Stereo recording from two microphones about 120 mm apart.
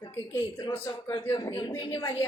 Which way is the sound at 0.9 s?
30° left (ahead or behind).